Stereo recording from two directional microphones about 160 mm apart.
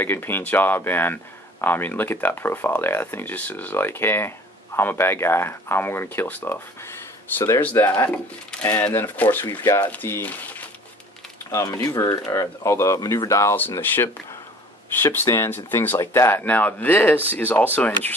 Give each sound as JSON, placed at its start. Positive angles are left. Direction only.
{"t": 0.0, "sound": "speech", "side_deg": 15}